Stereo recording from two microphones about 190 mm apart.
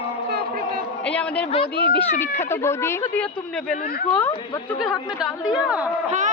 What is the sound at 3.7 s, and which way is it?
Speech, 50° left (ahead or behind).